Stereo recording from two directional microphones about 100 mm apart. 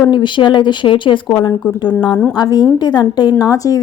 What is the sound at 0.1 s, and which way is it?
Speech, 50° left (ahead or behind).